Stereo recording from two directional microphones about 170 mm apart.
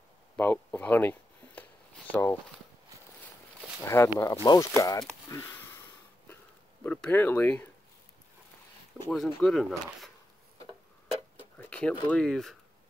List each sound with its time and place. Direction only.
0.4 s a sound: 10° left (ahead or behind)
3.8 s speech: 15° left (ahead or behind)
5.3 s a sound: 15° left (ahead or behind)
6.8 s speech: 10° left (ahead or behind)
9.1 s speech: centre (ahead or behind)
11.3 s tick-tock: 10° left (ahead or behind)
12.1 s speech: 5° left (ahead or behind)